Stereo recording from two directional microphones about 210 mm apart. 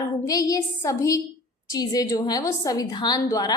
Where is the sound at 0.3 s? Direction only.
15° left (ahead or behind).